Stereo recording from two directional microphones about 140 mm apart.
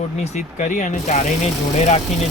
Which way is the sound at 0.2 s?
55° left (ahead or behind).